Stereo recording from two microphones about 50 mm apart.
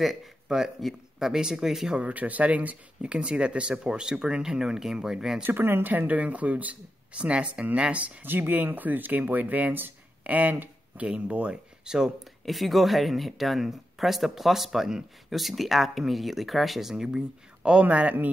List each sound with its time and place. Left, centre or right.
0.0 s speech: centre
2.0 s speech: right; by 5.4 s centre
5.4 s speech: right
8.2 s speech: right; by 12.1 s centre
12.4 s speech: centre
16.9 s speech: centre
17.8 s speech: right